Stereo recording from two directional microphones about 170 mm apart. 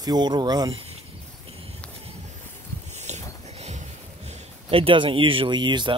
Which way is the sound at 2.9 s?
40° right (ahead or behind).